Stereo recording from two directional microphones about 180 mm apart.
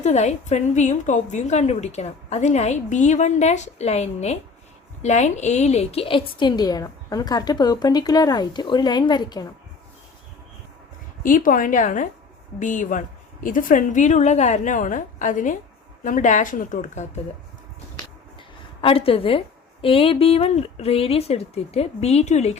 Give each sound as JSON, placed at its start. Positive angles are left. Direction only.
{"t": 0.0, "sound": "a woman's voice", "side_deg": 40}
{"t": 11.2, "sound": "a woman's voice", "side_deg": 45}
{"t": 18.3, "sound": "a sound", "side_deg": 30}
{"t": 19.8, "sound": "a woman's voice", "side_deg": 30}